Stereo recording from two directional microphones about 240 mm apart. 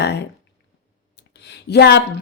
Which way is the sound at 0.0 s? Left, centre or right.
Left.